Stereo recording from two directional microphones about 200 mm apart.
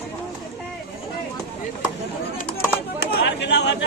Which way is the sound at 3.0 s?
60° left (ahead or behind).